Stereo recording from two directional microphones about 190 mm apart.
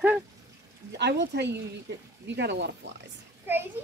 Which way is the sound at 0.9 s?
60° right (ahead or behind).